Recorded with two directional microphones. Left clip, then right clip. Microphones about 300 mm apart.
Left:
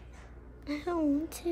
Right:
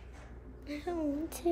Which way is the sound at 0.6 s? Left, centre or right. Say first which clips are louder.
Left 4 dB; centre.